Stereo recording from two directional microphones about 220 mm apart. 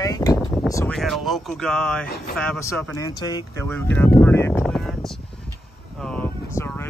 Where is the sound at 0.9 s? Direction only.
Centre (ahead or behind).